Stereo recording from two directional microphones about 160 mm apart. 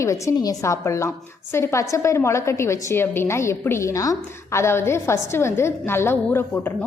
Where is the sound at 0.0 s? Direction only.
20° left (ahead or behind).